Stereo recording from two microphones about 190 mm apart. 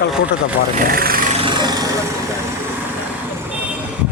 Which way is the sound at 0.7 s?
50° right (ahead or behind).